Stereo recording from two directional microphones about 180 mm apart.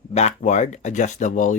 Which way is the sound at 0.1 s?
40° left (ahead or behind).